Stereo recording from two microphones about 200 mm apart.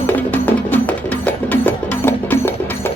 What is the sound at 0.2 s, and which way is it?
Music, 10° left (ahead or behind).